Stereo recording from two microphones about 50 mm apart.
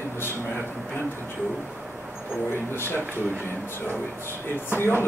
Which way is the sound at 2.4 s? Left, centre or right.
Left.